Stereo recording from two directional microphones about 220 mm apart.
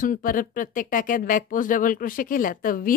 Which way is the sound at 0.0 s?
40° left (ahead or behind).